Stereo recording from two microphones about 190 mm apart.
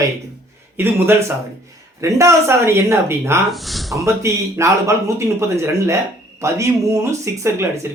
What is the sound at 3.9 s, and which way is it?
Speech, 15° right (ahead or behind).